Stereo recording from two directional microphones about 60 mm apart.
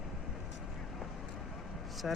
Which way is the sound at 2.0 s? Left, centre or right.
Centre.